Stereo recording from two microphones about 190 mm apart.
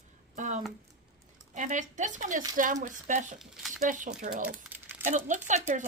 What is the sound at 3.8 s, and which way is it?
Speech, 40° right (ahead or behind).